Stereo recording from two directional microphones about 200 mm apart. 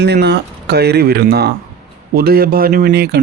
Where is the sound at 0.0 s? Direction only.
60° right (ahead or behind).